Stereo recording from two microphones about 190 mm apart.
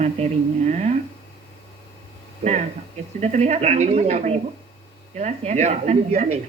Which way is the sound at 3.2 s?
35° right (ahead or behind).